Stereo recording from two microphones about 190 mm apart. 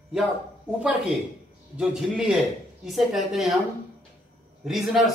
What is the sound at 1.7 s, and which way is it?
A man's voice, 5° right (ahead or behind).